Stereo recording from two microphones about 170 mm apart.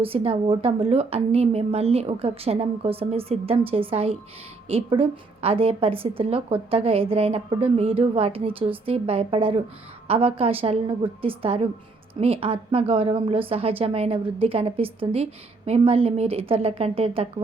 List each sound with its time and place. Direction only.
0.0 s a woman's voice: 35° right (ahead or behind)